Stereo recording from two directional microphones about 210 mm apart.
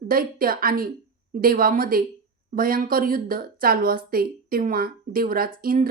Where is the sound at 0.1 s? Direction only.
45° right (ahead or behind).